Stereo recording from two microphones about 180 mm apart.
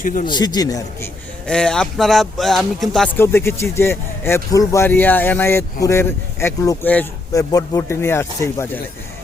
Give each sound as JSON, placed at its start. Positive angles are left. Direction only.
{"t": 0.0, "sound": "a man's voice", "side_deg": 45}
{"t": 0.3, "sound": "a man's voice", "side_deg": 25}
{"t": 1.5, "sound": "speech", "side_deg": 5}
{"t": 3.2, "sound": "speech", "side_deg": 15}